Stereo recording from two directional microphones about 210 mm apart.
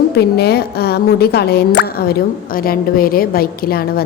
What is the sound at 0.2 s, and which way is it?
A woman's voice, 50° left (ahead or behind).